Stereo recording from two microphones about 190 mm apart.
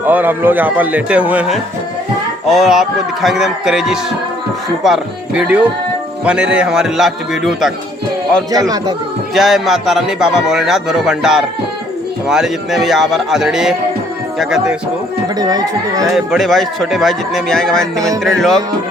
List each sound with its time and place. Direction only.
0.0 s a man's voice: 10° right (ahead or behind)
8.5 s speech: 20° right (ahead or behind)
9.3 s speech: centre (ahead or behind)
15.4 s speech: 20° right (ahead or behind)
16.1 s speech: centre (ahead or behind)